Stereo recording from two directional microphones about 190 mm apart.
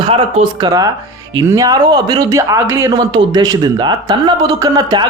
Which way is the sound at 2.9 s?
25° right (ahead or behind).